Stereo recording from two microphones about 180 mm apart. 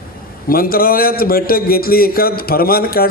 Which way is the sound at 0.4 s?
55° left (ahead or behind).